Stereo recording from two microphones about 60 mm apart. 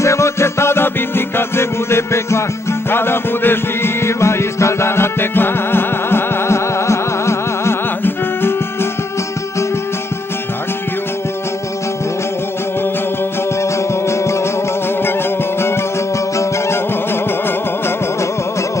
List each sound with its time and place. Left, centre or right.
0.0 s music: left
8.0 s music: left
16.3 s music: left